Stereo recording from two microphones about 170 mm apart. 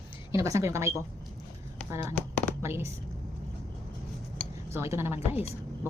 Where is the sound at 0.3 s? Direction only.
20° right (ahead or behind).